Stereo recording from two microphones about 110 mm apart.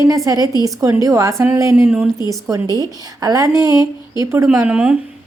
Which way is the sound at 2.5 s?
35° right (ahead or behind).